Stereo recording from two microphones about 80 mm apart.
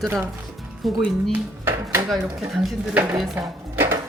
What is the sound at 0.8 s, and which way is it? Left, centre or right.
Speech, centre.